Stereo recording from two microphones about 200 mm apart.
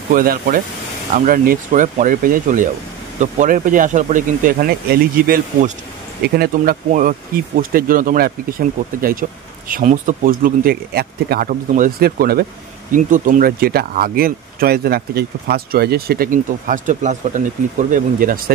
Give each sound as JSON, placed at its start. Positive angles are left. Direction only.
{"t": 0.1, "sound": "speech", "side_deg": -45}